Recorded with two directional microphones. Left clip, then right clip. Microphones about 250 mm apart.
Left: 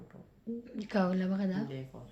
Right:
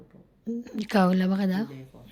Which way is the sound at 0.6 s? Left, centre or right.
Right.